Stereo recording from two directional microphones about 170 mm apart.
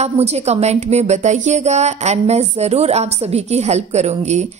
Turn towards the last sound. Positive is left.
turn(degrees=-40)  # may be behind; listen again after turning